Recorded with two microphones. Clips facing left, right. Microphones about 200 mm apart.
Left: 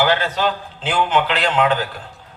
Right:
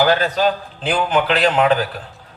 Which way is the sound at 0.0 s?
40° right (ahead or behind).